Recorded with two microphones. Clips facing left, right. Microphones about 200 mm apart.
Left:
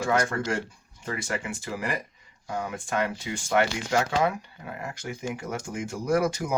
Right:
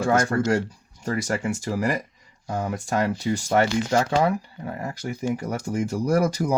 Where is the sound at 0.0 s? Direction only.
40° right (ahead or behind).